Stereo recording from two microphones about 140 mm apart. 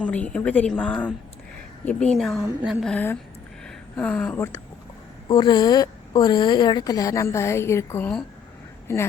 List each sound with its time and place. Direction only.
0.0 s a woman's voice: 10° left (ahead or behind)
2.9 s a woman's voice: 15° left (ahead or behind)
3.6 s a sound: 5° left (ahead or behind)
5.3 s a woman's voice: 30° left (ahead or behind)